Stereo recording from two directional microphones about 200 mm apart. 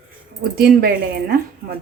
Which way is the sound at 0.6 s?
50° right (ahead or behind).